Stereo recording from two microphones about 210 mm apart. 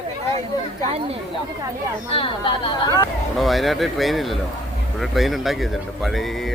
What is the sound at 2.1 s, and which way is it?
Speech, 25° left (ahead or behind).